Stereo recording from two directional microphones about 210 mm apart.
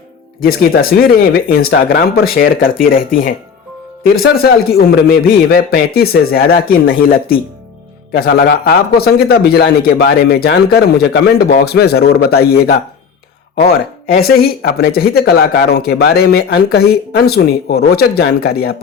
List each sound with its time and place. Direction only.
0.3 s a man's voice: 45° left (ahead or behind)
4.4 s a man's voice: 50° left (ahead or behind)